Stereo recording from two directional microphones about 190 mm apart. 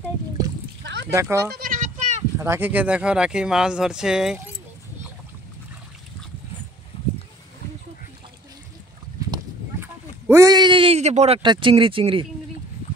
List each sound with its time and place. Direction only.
0.8 s a sound: 65° right (ahead or behind)
1.1 s speech: 15° right (ahead or behind)
1.5 s goat: 45° right (ahead or behind)
2.3 s speech: 10° right (ahead or behind)
9.3 s clip-clop: 15° right (ahead or behind)